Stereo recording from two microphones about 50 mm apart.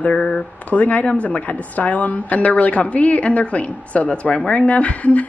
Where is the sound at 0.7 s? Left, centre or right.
Left.